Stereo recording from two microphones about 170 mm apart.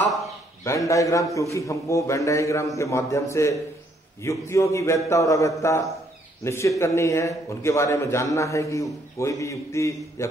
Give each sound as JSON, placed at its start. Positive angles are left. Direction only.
{"t": 0.7, "sound": "a man's voice", "side_deg": 20}